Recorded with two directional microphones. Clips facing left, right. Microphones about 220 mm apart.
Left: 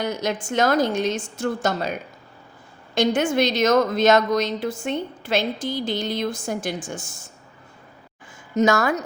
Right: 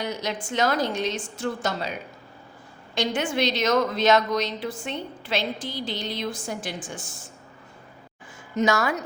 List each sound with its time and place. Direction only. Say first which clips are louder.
0.0 s a woman's voice: left 4 dB; 50° left (ahead or behind)
8.5 s a woman's voice: left 4 dB; 45° left (ahead or behind)